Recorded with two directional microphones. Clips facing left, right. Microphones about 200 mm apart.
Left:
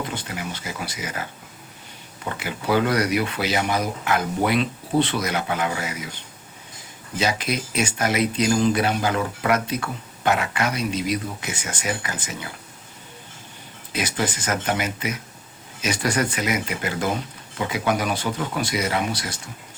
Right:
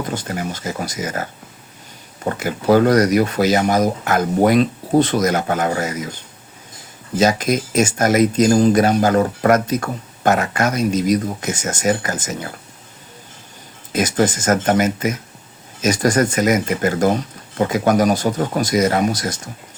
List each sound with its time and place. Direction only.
0.0 s speech: 45° right (ahead or behind)
7.2 s speech: 45° right (ahead or behind)
13.9 s speech: 45° right (ahead or behind)